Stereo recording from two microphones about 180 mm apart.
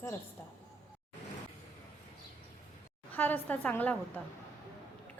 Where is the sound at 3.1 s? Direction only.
10° left (ahead or behind).